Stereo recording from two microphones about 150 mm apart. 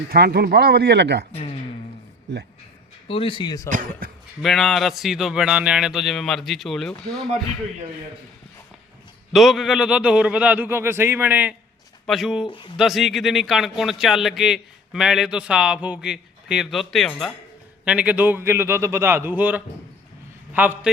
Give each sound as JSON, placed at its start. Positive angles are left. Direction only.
{"t": 0.1, "sound": "speech", "side_deg": -90}
{"t": 3.1, "sound": "speech", "side_deg": 35}
{"t": 3.7, "sound": "speech", "side_deg": -60}
{"t": 4.4, "sound": "a man's voice", "side_deg": 0}
{"t": 9.3, "sound": "a man's voice", "side_deg": 0}
{"t": 12.5, "sound": "speech", "side_deg": 35}
{"t": 12.7, "sound": "a man's voice", "side_deg": 0}
{"t": 17.8, "sound": "a man's voice", "side_deg": -10}